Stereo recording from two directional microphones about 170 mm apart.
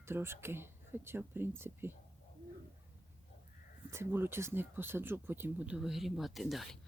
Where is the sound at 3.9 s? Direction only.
15° right (ahead or behind).